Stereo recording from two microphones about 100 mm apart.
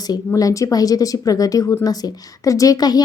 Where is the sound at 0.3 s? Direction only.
35° left (ahead or behind).